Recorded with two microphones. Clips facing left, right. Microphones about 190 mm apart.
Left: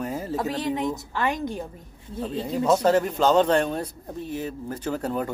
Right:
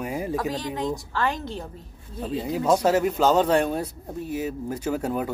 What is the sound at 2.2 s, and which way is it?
Speech, 10° right (ahead or behind).